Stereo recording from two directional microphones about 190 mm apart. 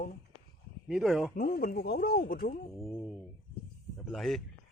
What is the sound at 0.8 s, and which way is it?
Speech, centre (ahead or behind).